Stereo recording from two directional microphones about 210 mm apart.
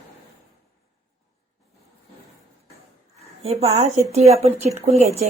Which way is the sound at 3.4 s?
30° right (ahead or behind).